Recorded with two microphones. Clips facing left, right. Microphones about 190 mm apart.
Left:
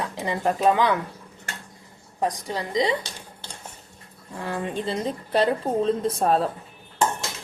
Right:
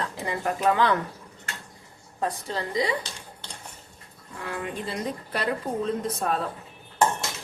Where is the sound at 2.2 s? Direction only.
15° left (ahead or behind).